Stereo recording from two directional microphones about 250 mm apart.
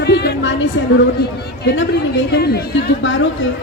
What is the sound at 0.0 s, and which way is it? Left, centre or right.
A woman's voice, left.